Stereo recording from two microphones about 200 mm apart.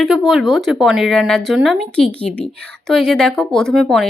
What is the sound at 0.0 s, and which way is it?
Speech, centre (ahead or behind).